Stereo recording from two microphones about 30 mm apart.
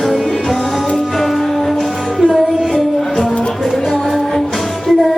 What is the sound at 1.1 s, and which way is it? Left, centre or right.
Music, centre.